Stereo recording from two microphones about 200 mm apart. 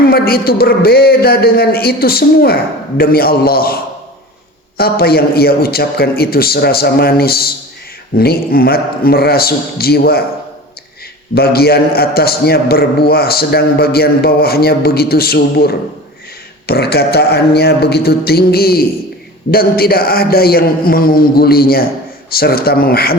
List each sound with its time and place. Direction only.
0.0 s a man's voice: 50° left (ahead or behind)
4.8 s a man's voice: 50° left (ahead or behind)
11.3 s a man's voice: 50° left (ahead or behind)